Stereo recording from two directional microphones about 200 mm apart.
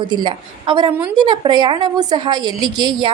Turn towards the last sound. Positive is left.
turn(degrees=-20)  # may be behind; listen again after turning